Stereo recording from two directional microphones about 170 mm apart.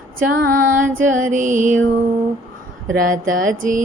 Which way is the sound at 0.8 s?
50° right (ahead or behind).